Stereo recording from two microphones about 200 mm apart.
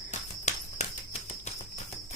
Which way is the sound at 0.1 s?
35° left (ahead or behind).